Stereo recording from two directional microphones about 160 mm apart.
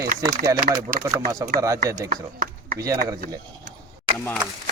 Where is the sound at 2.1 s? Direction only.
60° right (ahead or behind).